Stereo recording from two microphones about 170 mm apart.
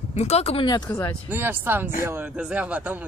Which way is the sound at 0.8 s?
15° left (ahead or behind).